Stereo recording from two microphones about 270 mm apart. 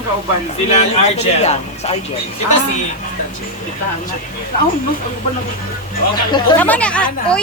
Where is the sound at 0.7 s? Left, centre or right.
Left.